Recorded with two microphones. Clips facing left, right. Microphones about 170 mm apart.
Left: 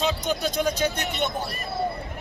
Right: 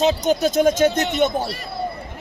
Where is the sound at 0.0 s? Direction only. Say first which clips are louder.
Right 8 dB; 45° right (ahead or behind).